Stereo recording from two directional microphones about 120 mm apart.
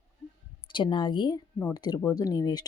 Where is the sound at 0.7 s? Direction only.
45° left (ahead or behind).